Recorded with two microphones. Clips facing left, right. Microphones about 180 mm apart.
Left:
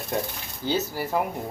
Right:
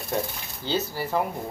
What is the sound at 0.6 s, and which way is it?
Speech, 10° left (ahead or behind).